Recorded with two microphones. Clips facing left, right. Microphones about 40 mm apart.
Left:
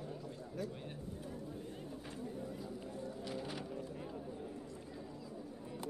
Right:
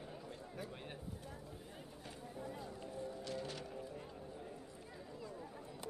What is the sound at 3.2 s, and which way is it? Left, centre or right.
Music, centre.